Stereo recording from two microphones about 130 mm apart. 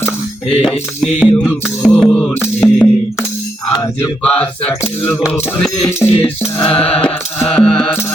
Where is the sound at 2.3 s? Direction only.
20° left (ahead or behind).